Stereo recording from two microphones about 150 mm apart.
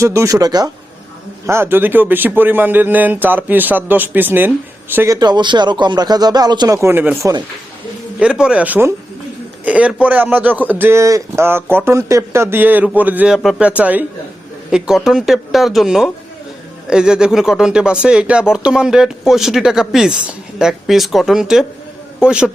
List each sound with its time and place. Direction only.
0.0 s speech: 20° right (ahead or behind)
1.5 s a man's voice: 15° right (ahead or behind)